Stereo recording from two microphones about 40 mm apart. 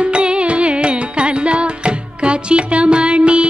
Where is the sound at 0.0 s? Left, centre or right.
Right.